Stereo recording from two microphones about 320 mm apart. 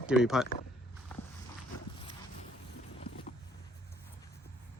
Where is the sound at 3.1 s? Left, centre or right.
Left.